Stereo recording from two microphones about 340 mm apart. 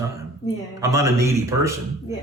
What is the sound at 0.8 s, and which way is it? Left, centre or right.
Speech, centre.